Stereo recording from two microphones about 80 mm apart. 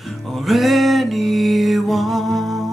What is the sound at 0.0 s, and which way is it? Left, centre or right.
Music, centre.